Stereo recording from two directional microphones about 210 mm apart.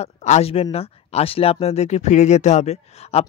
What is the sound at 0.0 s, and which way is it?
Speech, 30° left (ahead or behind).